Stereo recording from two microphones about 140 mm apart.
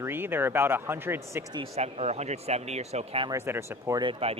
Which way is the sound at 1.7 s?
50° right (ahead or behind).